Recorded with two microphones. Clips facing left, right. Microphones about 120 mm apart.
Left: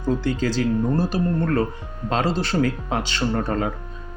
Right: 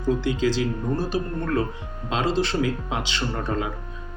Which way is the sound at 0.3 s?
45° left (ahead or behind).